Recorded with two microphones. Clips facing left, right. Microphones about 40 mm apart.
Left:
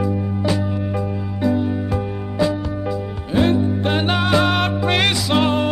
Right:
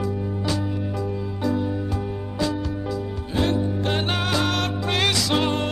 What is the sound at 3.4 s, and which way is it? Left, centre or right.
Music, left.